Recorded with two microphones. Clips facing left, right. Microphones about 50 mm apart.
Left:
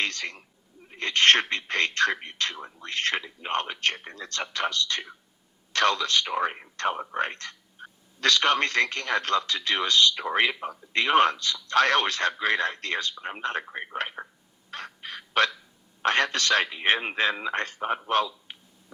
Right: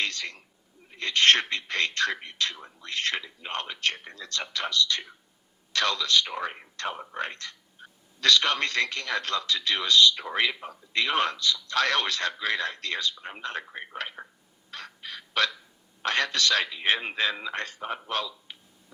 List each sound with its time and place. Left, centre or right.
0.0 s speech: left
3.2 s a man's voice: left
3.5 s speech: left
6.9 s speech: centre
7.2 s speech: left
13.7 s speech: centre
14.7 s fowl: left
16.0 s a man's voice: left